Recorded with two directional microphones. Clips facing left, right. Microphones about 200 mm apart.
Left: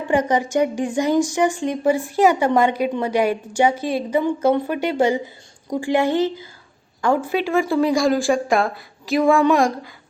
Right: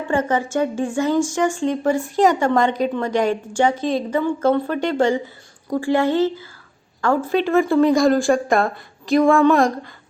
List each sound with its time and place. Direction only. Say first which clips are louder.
0.1 s a woman's voice: left 2 dB; 15° left (ahead or behind); by 9.9 s centre (ahead or behind)